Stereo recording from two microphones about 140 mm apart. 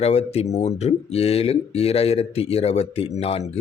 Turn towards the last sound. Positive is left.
turn(degrees=50)  # may be behind; listen again after turning